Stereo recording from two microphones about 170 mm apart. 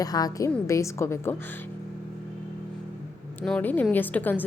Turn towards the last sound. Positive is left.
turn(degrees=10)  # may be behind; listen again after turning